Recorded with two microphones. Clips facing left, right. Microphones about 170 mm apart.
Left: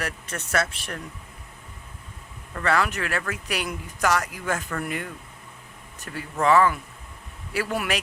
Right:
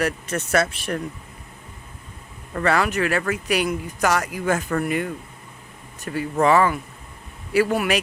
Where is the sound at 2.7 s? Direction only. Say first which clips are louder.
Right 3 dB; 10° right (ahead or behind).